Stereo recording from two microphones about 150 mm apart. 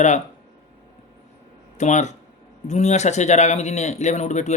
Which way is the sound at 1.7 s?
55° left (ahead or behind).